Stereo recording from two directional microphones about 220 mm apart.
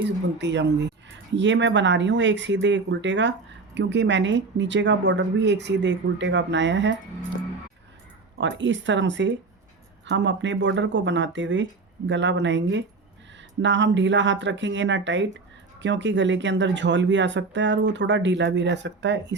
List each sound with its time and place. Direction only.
0.3 s speech: 50° right (ahead or behind)
8.4 s speech: 55° right (ahead or behind)